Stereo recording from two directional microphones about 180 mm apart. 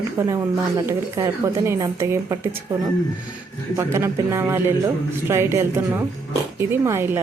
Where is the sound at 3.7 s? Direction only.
15° right (ahead or behind).